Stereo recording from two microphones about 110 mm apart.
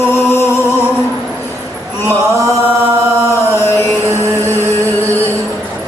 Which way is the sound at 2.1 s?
20° left (ahead or behind).